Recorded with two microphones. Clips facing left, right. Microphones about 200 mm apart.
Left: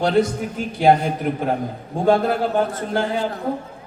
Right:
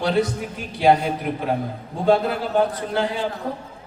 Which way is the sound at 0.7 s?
50° left (ahead or behind).